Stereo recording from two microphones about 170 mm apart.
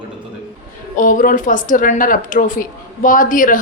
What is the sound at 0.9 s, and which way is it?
Speech, 50° left (ahead or behind).